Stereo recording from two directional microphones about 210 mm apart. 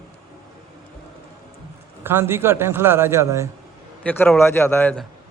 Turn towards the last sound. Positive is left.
turn(degrees=5)  # may be behind; listen again after turning